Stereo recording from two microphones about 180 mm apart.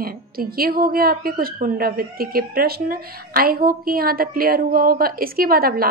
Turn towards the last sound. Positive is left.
turn(degrees=-55)  # may be behind; listen again after turning